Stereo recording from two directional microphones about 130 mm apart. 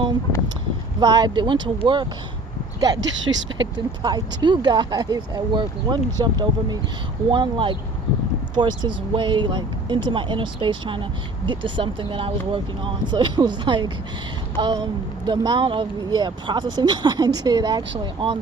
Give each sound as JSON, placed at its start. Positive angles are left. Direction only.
{"t": 0.9, "sound": "speech", "side_deg": -30}
{"t": 3.3, "sound": "speech", "side_deg": -30}